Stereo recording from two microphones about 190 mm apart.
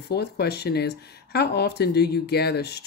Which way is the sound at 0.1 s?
60° left (ahead or behind).